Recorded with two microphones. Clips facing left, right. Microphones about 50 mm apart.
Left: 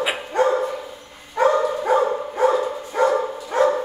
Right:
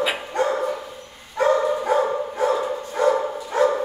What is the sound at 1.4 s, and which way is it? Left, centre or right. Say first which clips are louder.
Dog: left 1 dB; centre.